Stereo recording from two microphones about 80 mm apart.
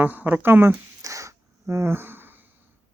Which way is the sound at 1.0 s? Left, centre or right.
Right.